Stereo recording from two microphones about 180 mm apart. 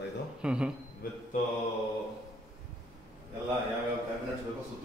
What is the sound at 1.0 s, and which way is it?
Mantra, 50° left (ahead or behind).